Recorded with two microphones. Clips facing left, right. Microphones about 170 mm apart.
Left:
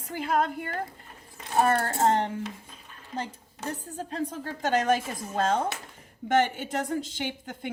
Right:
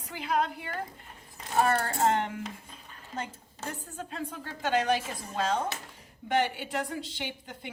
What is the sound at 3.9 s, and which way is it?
Speech, 35° left (ahead or behind).